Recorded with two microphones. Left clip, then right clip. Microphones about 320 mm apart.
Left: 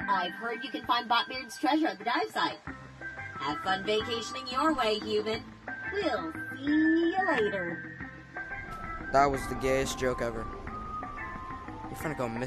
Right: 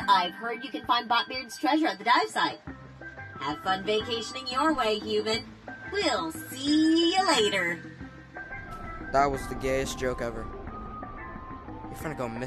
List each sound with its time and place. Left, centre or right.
0.4 s a woman's voice: centre
3.3 s a woman's voice: centre
5.9 s speech: centre
6.6 s speech: right
9.1 s a woman's voice: centre
12.0 s a woman's voice: centre